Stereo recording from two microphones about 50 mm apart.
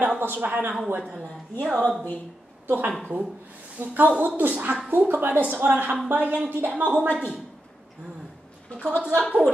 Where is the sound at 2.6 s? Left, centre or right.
Right.